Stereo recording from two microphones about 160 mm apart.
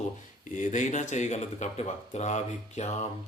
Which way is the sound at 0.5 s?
50° left (ahead or behind).